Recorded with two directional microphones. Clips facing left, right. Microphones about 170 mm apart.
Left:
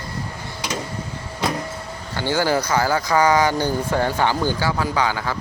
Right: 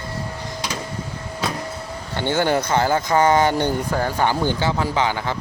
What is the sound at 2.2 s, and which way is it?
Speech, 25° right (ahead or behind).